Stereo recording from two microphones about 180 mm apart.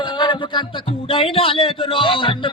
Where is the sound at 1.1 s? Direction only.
30° left (ahead or behind).